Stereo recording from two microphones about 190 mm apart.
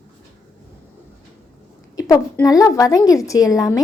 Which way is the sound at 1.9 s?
20° left (ahead or behind).